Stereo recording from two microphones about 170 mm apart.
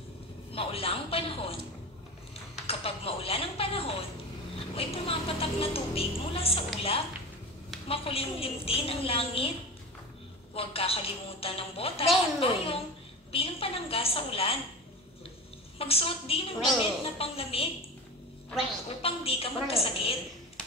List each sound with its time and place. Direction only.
0.5 s speech: 35° left (ahead or behind)
2.6 s speech: 35° left (ahead or behind)
7.9 s speech: 35° left (ahead or behind)
10.5 s speech: 35° left (ahead or behind)
15.8 s speech: 35° left (ahead or behind)
18.9 s speech: 35° left (ahead or behind)